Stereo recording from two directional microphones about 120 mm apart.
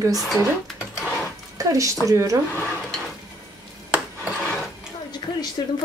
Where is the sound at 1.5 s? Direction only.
30° right (ahead or behind).